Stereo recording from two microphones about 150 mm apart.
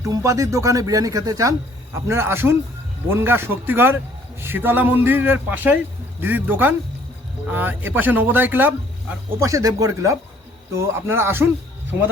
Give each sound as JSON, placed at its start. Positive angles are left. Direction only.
{"t": 0.0, "sound": "a man's voice", "side_deg": -20}